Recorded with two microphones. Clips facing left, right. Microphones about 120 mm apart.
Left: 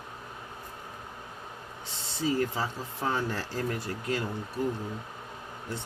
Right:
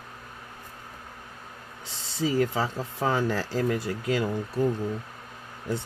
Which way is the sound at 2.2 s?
90° right.